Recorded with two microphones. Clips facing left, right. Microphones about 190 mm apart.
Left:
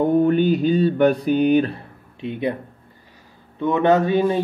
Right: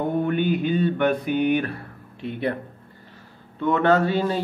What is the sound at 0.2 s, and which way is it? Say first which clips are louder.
Music: left 5 dB; 35° left (ahead or behind).